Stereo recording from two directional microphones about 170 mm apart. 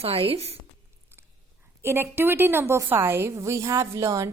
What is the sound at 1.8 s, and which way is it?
A woman's voice, 15° right (ahead or behind).